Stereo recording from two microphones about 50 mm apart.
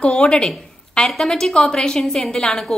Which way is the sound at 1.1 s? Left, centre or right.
Centre.